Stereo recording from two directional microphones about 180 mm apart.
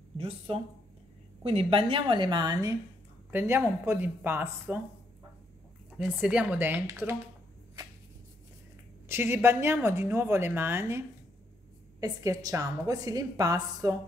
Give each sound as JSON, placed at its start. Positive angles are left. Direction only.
{"t": 1.4, "sound": "a woman's voice", "side_deg": -30}
{"t": 5.9, "sound": "a woman's voice", "side_deg": -5}
{"t": 9.1, "sound": "a woman's voice", "side_deg": -15}